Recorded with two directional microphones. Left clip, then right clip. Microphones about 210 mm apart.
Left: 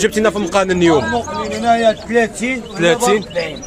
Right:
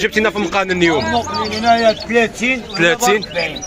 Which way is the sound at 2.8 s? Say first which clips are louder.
Left 1 dB; 5° left (ahead or behind).